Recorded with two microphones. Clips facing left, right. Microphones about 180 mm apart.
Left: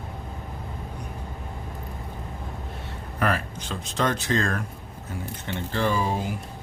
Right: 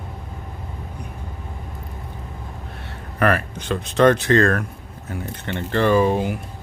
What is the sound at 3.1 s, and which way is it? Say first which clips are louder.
Speech: right 6 dB; 65° right (ahead or behind).